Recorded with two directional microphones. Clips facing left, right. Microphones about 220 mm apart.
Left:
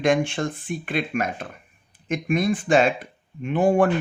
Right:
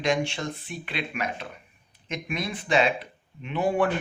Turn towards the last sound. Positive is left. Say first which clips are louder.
# left 6 dB
turn(degrees=45)  # may be behind; listen again after turning